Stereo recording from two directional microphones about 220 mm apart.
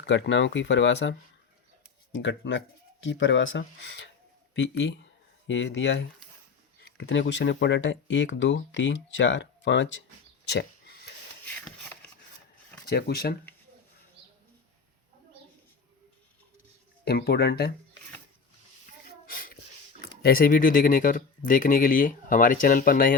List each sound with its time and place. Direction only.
0.0 s speech: 55° left (ahead or behind)
2.1 s speech: 60° left (ahead or behind)
10.5 s a sound: 50° left (ahead or behind)
12.9 s speech: 45° left (ahead or behind)
17.1 s speech: 45° left (ahead or behind)
19.3 s a sound: 40° left (ahead or behind)
20.2 s speech: 40° left (ahead or behind)